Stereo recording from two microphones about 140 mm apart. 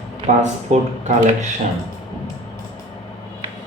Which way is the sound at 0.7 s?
55° right (ahead or behind).